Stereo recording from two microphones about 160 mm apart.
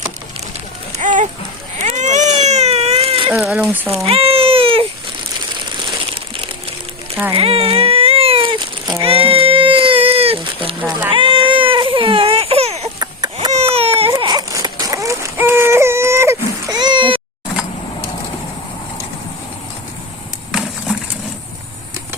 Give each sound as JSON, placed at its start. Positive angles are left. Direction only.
{"t": 0.9, "sound": "a sound", "side_deg": -50}
{"t": 1.8, "sound": "baby cry", "side_deg": -45}
{"t": 3.3, "sound": "speech", "side_deg": 0}
{"t": 4.0, "sound": "baby cry", "side_deg": -35}
{"t": 6.1, "sound": "pigeon", "side_deg": -35}
{"t": 7.3, "sound": "cat", "side_deg": -35}
{"t": 9.0, "sound": "a sound", "side_deg": -35}
{"t": 11.1, "sound": "baby cry", "side_deg": -30}
{"t": 14.2, "sound": "baby cry", "side_deg": -25}
{"t": 16.7, "sound": "meow", "side_deg": -30}
{"t": 20.5, "sound": "a sound", "side_deg": -5}